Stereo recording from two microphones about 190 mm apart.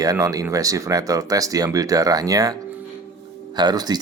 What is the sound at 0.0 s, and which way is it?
Speech, 20° right (ahead or behind).